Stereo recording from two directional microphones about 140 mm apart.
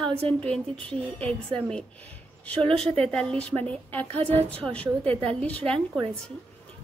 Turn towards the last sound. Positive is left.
turn(degrees=5)  # may be behind; listen again after turning